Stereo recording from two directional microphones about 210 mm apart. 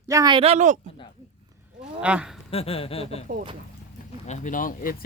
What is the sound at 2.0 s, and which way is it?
Speech, 5° right (ahead or behind).